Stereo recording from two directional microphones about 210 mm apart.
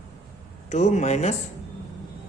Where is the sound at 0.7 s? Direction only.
35° left (ahead or behind).